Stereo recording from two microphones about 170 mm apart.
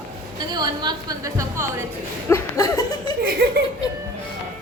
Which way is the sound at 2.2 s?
20° left (ahead or behind).